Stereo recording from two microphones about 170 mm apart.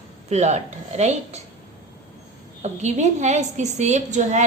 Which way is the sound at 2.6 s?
45° right (ahead or behind).